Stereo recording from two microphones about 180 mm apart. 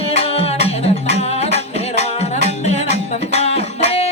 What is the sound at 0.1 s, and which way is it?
Music, 35° left (ahead or behind).